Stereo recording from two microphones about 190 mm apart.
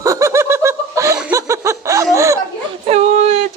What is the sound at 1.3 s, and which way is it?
Laughter, 15° right (ahead or behind).